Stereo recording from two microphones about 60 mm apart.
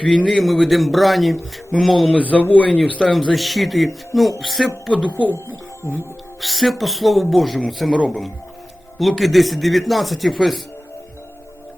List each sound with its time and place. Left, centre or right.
0.3 s speech: centre
2.1 s speech: left
3.0 s speech: centre
5.0 s speech: left
6.4 s speech: centre